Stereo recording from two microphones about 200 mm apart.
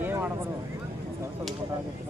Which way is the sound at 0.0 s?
10° right (ahead or behind).